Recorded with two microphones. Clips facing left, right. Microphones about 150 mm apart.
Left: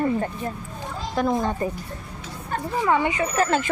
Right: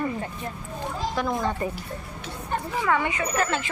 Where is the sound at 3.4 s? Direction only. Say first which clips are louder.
Left 5 dB; 40° left (ahead or behind).